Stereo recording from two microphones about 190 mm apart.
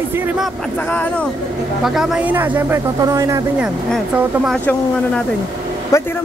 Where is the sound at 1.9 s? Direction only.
Centre (ahead or behind); by 3.4 s 15° right (ahead or behind).